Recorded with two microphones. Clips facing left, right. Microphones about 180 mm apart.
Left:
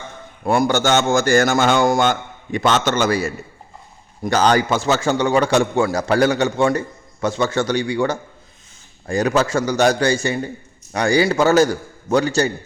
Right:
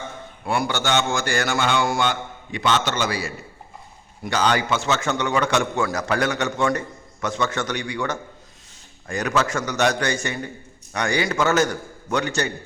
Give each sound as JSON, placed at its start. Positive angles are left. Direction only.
{"t": 0.4, "sound": "a man's voice", "side_deg": 45}